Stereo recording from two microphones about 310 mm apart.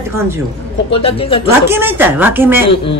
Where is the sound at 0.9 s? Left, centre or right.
Centre.